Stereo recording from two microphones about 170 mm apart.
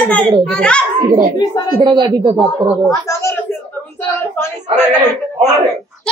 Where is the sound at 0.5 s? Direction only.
5° left (ahead or behind).